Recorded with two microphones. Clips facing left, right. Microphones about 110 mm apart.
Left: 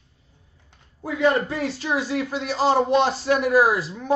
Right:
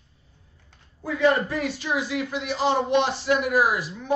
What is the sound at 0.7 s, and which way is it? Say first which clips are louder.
Speech: left 1 dB; 25° left (ahead or behind).